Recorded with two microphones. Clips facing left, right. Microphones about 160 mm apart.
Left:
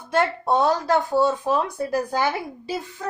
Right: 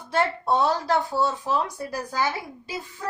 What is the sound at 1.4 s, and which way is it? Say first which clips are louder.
Speech: left 4 dB; 55° left (ahead or behind).